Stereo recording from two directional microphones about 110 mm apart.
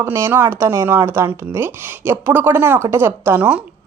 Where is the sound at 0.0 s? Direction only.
25° right (ahead or behind).